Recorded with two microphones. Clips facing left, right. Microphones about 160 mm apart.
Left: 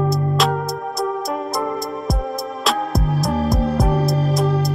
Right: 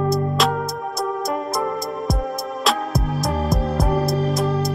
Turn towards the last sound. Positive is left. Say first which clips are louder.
# left 1 dB
turn(degrees=0)  # may be behind; listen again after turning